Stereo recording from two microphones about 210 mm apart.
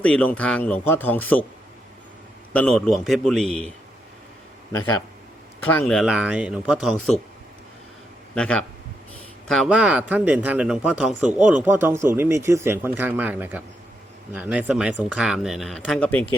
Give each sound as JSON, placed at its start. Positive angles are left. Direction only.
{"t": 0.0, "sound": "speech", "side_deg": 5}
{"t": 2.5, "sound": "speech", "side_deg": 5}
{"t": 5.6, "sound": "speech", "side_deg": 5}
{"t": 8.4, "sound": "speech", "side_deg": 5}